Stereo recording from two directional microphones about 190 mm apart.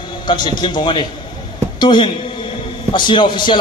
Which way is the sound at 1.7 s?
25° left (ahead or behind).